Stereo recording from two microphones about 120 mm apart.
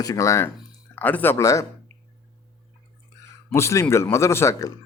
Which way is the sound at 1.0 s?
15° left (ahead or behind).